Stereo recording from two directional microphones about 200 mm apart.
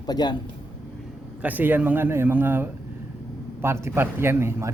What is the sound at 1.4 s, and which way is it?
Speech, 10° right (ahead or behind).